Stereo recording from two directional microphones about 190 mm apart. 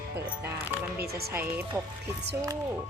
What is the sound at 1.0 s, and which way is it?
Speech, 55° right (ahead or behind).